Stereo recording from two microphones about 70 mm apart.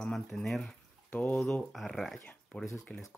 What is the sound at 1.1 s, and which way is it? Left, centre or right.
Speech, left.